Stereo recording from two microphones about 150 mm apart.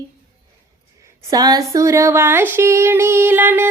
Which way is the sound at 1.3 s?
25° right (ahead or behind).